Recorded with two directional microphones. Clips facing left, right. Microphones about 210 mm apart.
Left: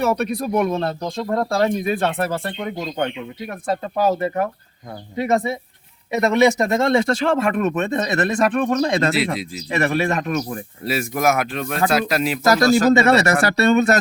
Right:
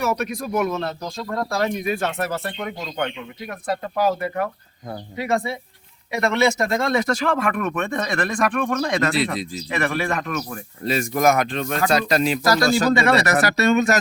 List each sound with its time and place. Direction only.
0.0 s speech: 30° left (ahead or behind)
9.1 s speech: centre (ahead or behind)
9.6 s speech: 25° left (ahead or behind)
10.8 s speech: 5° left (ahead or behind)
12.9 s speech: 25° left (ahead or behind)